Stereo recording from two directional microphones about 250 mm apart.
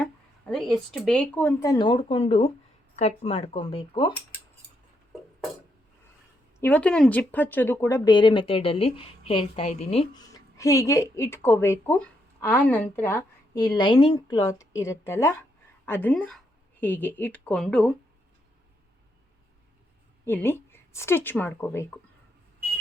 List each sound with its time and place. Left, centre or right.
0.0 s speech: centre
6.6 s a woman's voice: centre
20.2 s a woman's voice: centre